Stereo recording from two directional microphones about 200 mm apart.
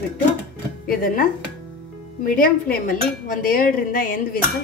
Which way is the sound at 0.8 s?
45° left (ahead or behind).